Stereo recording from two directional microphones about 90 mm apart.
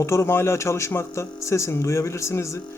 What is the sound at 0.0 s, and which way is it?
Speech, 30° left (ahead or behind).